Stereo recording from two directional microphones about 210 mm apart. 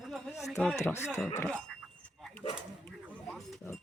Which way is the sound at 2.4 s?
25° left (ahead or behind).